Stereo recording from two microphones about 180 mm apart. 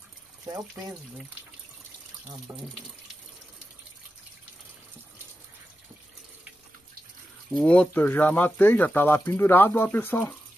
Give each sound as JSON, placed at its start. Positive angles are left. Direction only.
{"t": 0.5, "sound": "speech", "side_deg": -20}
{"t": 2.5, "sound": "speech", "side_deg": -15}
{"t": 7.5, "sound": "speech", "side_deg": 5}